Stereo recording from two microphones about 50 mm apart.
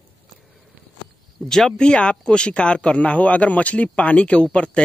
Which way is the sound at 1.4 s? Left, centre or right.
Centre.